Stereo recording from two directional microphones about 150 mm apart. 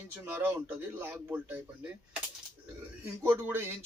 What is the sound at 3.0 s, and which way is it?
Speech, 15° right (ahead or behind).